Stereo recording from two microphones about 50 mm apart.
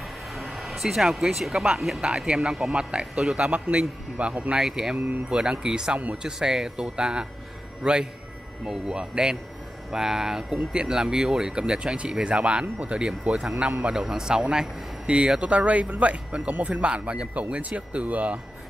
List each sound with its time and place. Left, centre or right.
0.3 s vehicle: centre
1.8 s speech: centre
2.0 s speech: centre
4.6 s speech: centre
4.9 s speech: right
5.3 s speech: centre